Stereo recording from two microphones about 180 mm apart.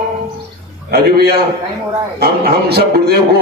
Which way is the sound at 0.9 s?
60° right (ahead or behind).